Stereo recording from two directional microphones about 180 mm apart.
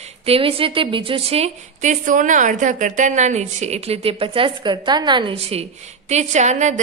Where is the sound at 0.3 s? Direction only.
30° right (ahead or behind).